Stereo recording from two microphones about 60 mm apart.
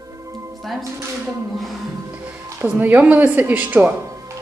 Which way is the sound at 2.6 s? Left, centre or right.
Right.